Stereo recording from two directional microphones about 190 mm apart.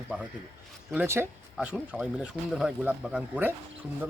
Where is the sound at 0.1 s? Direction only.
5° right (ahead or behind).